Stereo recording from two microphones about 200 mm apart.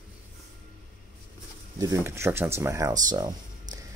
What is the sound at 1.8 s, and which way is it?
Speech, 15° right (ahead or behind).